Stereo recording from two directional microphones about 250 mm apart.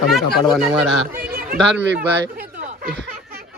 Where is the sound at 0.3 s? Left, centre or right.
Centre.